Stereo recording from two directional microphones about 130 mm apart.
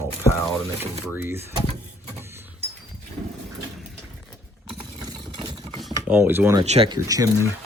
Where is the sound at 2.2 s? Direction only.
20° right (ahead or behind).